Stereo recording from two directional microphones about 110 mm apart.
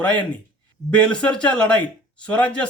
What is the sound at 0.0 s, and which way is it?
Speech, 10° left (ahead or behind).